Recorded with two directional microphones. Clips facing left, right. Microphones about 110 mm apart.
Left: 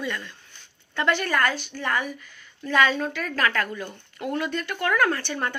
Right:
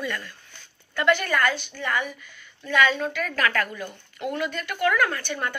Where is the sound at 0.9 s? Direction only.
35° left (ahead or behind).